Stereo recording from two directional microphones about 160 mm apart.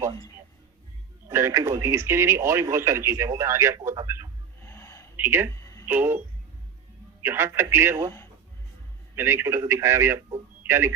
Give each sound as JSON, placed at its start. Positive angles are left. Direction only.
{"t": 1.3, "sound": "a man's voice", "side_deg": -15}
{"t": 4.6, "sound": "a sound", "side_deg": 15}
{"t": 5.1, "sound": "speech", "side_deg": -15}
{"t": 5.5, "sound": "a sound", "side_deg": 20}
{"t": 5.9, "sound": "a man's voice", "side_deg": -15}
{"t": 9.1, "sound": "a man's voice", "side_deg": -15}